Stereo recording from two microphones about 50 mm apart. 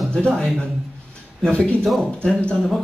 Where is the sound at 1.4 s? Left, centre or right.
Centre.